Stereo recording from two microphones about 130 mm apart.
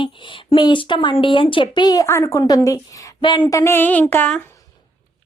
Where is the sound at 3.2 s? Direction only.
40° left (ahead or behind).